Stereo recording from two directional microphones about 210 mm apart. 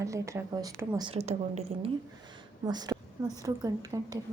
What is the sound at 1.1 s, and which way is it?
Speech, 30° right (ahead or behind).